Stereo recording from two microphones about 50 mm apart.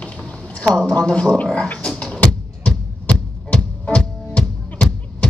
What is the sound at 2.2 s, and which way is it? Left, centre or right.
Music, left.